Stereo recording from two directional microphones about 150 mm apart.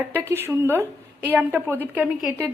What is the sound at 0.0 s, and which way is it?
A woman's voice, 15° right (ahead or behind).